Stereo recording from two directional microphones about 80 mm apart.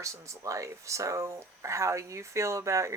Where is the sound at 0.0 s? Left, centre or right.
Right.